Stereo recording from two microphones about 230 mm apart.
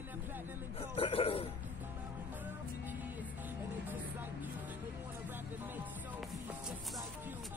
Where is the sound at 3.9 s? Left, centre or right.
Centre.